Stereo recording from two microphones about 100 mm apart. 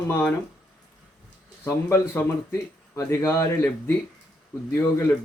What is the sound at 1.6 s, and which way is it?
A man's voice, 25° left (ahead or behind).